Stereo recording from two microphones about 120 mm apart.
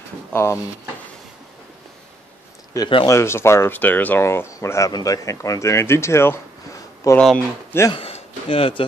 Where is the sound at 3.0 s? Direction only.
20° left (ahead or behind).